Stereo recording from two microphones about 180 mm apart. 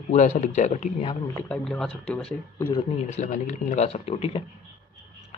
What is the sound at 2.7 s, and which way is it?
Speech, 40° left (ahead or behind).